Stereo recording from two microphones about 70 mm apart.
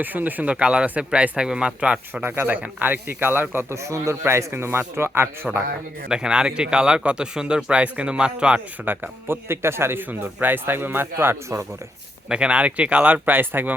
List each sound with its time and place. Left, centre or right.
0.0 s a man's voice: right
2.2 s speech: right
3.8 s a man's voice: right
6.1 s a man's voice: centre
8.8 s speech: right
12.3 s speech: centre